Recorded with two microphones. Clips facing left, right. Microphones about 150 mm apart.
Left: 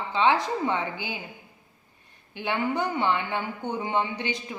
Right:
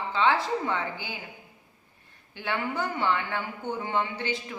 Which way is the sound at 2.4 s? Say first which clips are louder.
Left 3 dB; 20° left (ahead or behind).